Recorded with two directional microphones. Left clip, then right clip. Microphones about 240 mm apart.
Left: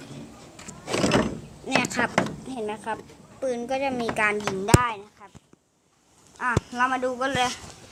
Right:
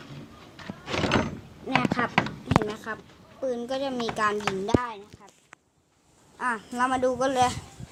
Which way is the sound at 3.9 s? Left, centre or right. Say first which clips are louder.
Left 2 dB; centre.